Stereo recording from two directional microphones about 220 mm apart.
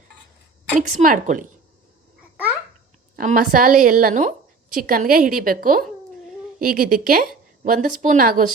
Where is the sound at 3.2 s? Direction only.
40° right (ahead or behind).